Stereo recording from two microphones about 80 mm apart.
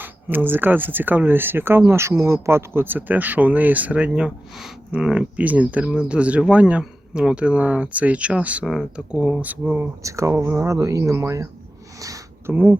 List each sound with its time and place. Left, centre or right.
0.0 s speech: right
8.6 s speech: centre
9.5 s speech: right
10.0 s speech: right
11.9 s a sound: right
12.5 s speech: right